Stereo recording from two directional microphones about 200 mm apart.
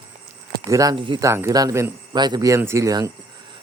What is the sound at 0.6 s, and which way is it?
Speech, 15° right (ahead or behind).